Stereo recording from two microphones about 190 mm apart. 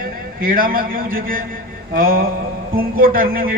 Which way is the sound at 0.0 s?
50° right (ahead or behind).